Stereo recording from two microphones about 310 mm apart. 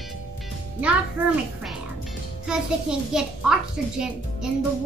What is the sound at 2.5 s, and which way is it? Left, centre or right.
A child's voice, centre.